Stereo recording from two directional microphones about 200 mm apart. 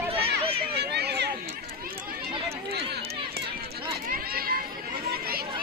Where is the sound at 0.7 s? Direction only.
55° right (ahead or behind).